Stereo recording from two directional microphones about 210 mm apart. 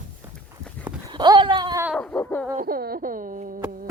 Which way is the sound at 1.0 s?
20° right (ahead or behind).